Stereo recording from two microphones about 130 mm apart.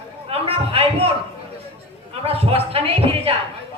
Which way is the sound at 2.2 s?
50° right (ahead or behind).